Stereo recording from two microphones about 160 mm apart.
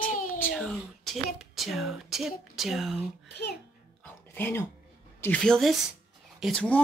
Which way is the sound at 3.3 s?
90° left.